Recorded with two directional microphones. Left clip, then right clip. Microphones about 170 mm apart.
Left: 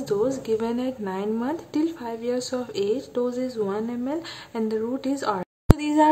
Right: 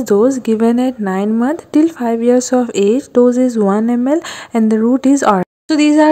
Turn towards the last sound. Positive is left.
turn(degrees=-35)  # may be behind; listen again after turning